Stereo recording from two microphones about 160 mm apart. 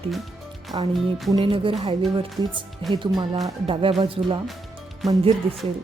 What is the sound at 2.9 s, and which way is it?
A woman's voice, 30° right (ahead or behind).